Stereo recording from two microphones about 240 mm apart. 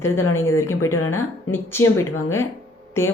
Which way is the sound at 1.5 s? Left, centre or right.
Centre.